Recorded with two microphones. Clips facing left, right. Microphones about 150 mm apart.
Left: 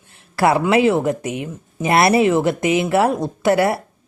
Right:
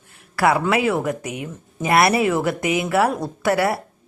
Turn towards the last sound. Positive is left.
turn(degrees=25)  # may be behind; listen again after turning